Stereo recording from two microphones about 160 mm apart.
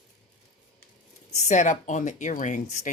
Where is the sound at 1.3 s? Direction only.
50° left (ahead or behind).